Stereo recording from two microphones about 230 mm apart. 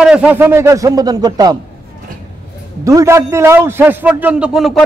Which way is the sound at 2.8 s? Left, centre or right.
Centre.